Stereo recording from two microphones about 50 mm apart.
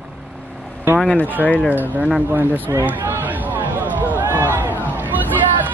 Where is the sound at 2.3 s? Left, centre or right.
Right.